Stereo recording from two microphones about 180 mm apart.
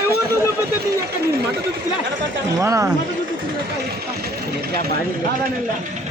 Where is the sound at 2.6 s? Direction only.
15° right (ahead or behind).